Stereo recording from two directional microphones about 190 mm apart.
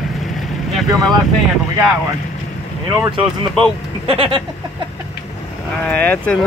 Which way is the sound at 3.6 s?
5° left (ahead or behind).